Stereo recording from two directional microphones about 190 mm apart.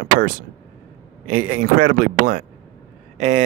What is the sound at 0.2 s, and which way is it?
Speech, 45° right (ahead or behind).